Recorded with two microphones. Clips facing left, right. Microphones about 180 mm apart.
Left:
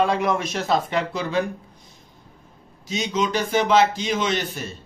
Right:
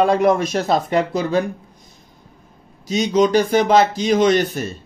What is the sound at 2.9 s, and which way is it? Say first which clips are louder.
A man's voice: right 8 dB; 40° right (ahead or behind).